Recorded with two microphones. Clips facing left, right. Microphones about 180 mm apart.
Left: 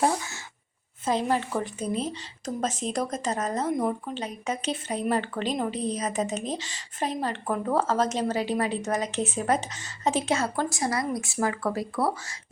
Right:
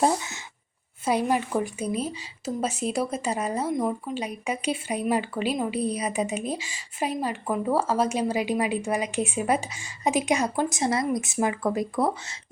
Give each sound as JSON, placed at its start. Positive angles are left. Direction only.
{"t": 0.0, "sound": "speech", "side_deg": -20}
{"t": 3.8, "sound": "speech", "side_deg": 0}
{"t": 4.1, "sound": "speech", "side_deg": -10}